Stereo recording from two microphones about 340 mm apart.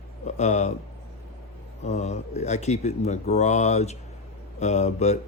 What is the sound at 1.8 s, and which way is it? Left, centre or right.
Speech, centre.